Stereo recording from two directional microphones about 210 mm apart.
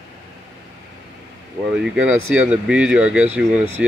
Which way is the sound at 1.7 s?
5° right (ahead or behind).